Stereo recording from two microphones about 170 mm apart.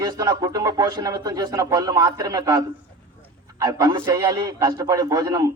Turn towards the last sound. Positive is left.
turn(degrees=-20)  # may be behind; listen again after turning